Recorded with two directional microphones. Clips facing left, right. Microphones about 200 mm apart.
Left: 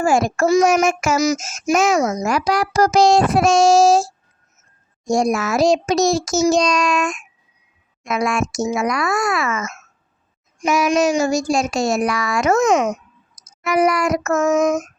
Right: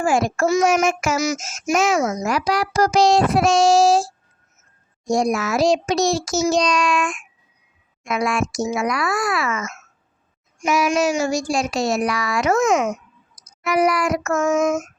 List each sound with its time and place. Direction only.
0.0 s speech: 45° left (ahead or behind)